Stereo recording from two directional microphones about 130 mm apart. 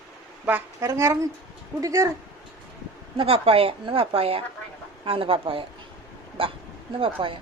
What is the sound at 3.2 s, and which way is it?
A woman's voice, 45° right (ahead or behind).